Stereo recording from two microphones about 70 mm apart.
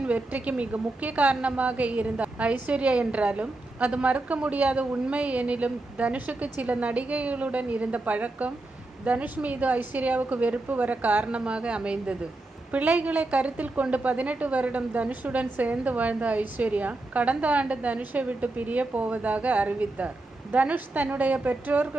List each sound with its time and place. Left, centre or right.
0.0 s a woman's voice: centre